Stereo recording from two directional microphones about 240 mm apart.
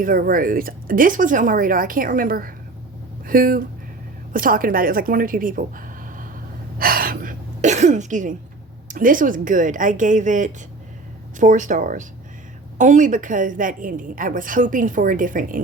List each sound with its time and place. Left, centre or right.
0.0 s a woman's voice: right
6.7 s throat clearing: right
8.9 s a woman's voice: right